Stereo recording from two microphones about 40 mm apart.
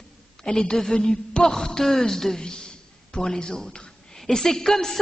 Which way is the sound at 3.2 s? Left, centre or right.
Centre.